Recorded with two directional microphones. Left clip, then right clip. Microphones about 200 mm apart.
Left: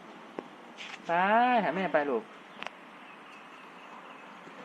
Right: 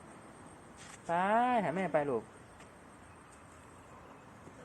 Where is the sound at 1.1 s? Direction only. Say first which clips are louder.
Left 5 dB; 5° right (ahead or behind).